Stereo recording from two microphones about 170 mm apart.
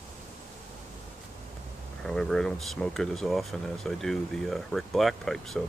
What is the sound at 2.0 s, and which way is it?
Speech, 5° left (ahead or behind).